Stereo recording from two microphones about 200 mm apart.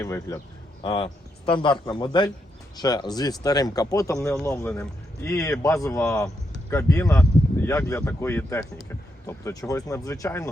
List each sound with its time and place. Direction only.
0.0 s speech: 15° left (ahead or behind)
0.8 s speech: 25° left (ahead or behind)